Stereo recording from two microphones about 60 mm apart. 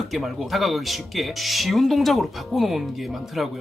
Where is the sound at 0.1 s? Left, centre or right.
Centre.